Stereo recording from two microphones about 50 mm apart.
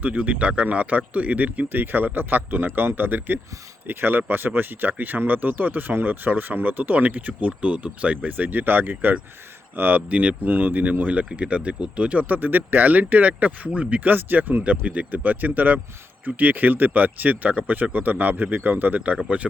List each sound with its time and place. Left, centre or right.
0.0 s speech: right